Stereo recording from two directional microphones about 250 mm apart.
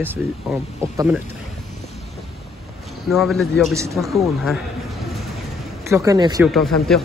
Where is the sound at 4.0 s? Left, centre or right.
Centre.